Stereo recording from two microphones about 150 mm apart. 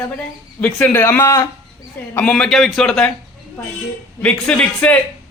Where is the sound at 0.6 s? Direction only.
10° left (ahead or behind).